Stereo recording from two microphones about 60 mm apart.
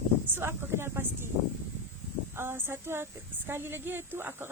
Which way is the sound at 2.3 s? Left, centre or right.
Right.